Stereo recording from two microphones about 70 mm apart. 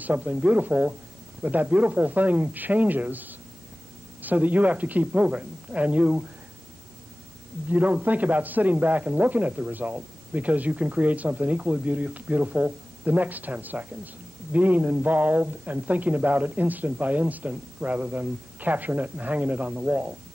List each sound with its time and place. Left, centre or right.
0.0 s a man's voice: right
7.7 s a man's voice: right